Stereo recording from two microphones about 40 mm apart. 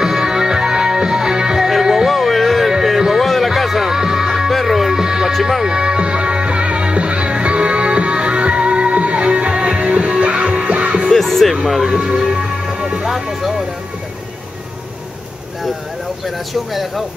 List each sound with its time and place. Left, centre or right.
0.0 s music: centre
5.0 s music: centre
5.3 s music: centre
5.7 s music: right
11.1 s music: centre
11.6 s speech: centre
12.2 s music: centre
16.3 s speech: centre